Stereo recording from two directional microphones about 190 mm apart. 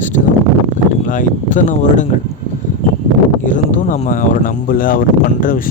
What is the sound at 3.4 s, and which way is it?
Speech, 40° left (ahead or behind).